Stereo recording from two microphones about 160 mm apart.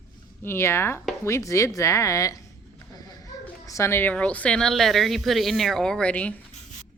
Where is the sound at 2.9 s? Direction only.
25° left (ahead or behind).